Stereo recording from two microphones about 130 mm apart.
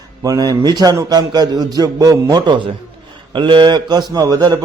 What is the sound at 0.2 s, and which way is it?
A man's voice, 30° right (ahead or behind).